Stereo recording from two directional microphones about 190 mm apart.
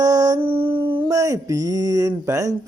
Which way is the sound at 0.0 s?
20° right (ahead or behind).